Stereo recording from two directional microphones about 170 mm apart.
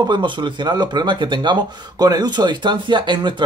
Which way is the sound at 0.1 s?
25° right (ahead or behind).